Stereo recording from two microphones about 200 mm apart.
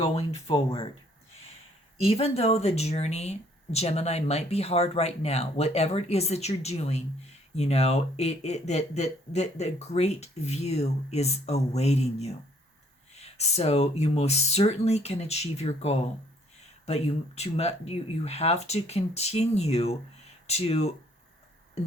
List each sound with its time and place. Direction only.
0.0 s speech: 30° left (ahead or behind)
2.0 s speech: 30° left (ahead or behind)